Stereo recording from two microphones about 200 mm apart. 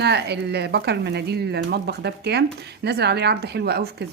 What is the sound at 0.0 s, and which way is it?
Speech, 55° right (ahead or behind).